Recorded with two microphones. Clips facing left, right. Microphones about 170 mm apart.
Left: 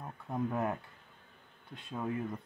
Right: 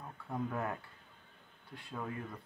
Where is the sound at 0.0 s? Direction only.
20° left (ahead or behind).